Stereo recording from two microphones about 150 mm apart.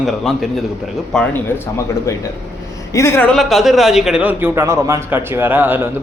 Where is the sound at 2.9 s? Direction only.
20° left (ahead or behind).